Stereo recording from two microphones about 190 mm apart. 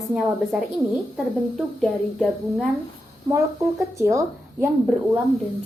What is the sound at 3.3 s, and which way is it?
A woman's voice, 15° right (ahead or behind).